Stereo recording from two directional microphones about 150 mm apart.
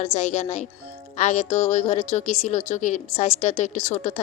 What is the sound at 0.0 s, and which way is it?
A woman's voice, 50° left (ahead or behind).